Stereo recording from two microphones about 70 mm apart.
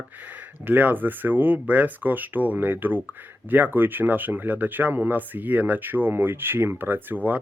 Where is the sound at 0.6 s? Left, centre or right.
Right.